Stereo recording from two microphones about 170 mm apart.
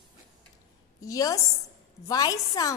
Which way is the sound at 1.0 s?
20° left (ahead or behind).